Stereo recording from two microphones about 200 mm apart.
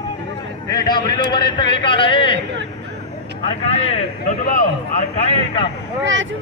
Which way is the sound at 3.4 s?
30° left (ahead or behind).